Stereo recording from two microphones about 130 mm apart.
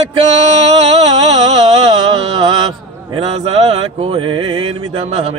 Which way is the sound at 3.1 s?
50° right (ahead or behind).